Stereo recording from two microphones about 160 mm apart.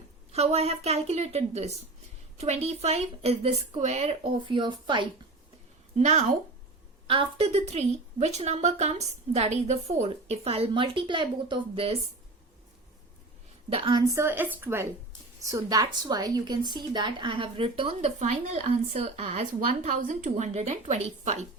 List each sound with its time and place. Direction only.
0.3 s a woman's voice: 40° right (ahead or behind)
6.0 s a woman's voice: 45° right (ahead or behind)
7.1 s a woman's voice: 35° right (ahead or behind)
13.7 s a woman's voice: 35° right (ahead or behind)
14.1 s a woman's voice: 15° right (ahead or behind); by 19.5 s 40° right (ahead or behind)
19.5 s a woman's voice: 55° right (ahead or behind)